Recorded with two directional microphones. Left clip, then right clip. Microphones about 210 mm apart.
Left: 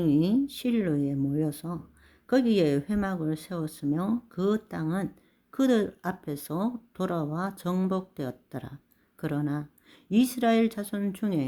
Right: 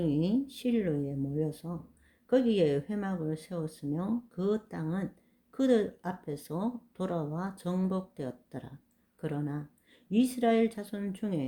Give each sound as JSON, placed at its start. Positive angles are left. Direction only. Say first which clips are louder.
{"t": 0.0, "sound": "speech", "louder": "left 5 dB", "side_deg": 35}